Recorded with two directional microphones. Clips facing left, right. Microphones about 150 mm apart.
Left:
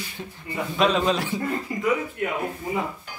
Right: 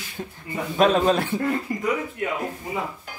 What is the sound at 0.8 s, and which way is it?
Speech, 45° right (ahead or behind).